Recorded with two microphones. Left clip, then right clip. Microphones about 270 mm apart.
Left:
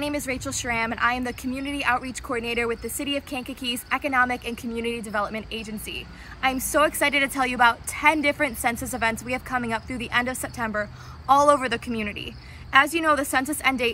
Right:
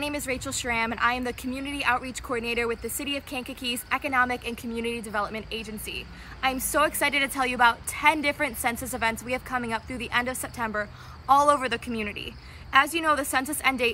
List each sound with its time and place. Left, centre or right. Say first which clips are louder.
0.0 s speech: left 2 dB; centre
6.4 s speech: left 3 dB; centre